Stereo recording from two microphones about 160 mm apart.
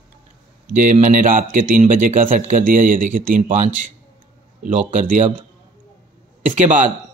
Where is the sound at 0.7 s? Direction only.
55° right (ahead or behind).